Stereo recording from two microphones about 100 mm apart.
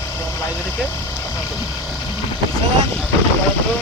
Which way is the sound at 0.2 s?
25° left (ahead or behind).